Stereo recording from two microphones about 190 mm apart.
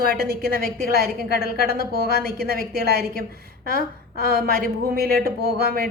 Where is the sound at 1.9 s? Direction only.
50° right (ahead or behind).